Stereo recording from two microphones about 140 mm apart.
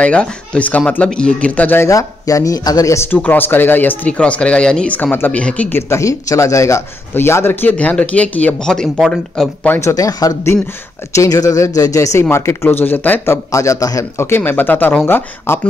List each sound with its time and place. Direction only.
0.0 s speech: 5° left (ahead or behind)
9.8 s speech: 25° left (ahead or behind)